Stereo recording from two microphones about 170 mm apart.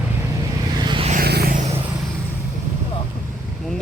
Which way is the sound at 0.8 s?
25° right (ahead or behind).